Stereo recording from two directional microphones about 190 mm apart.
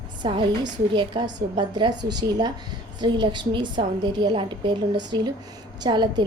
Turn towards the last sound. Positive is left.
turn(degrees=-20)  # may be behind; listen again after turning